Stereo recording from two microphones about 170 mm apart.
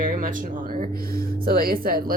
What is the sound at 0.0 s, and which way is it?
Speech, 50° right (ahead or behind).